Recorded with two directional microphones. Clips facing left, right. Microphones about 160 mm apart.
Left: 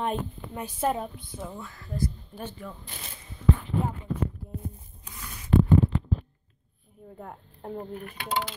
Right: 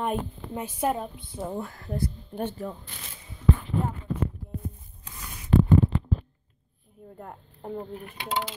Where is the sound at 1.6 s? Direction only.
55° right (ahead or behind).